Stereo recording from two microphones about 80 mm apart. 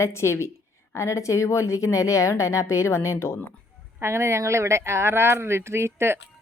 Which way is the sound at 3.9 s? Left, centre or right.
Right.